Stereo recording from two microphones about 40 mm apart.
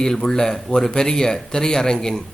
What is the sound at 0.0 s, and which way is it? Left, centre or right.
A man's voice, centre.